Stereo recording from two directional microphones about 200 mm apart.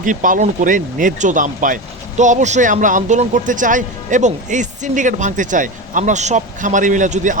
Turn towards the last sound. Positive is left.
turn(degrees=-40)  # may be behind; listen again after turning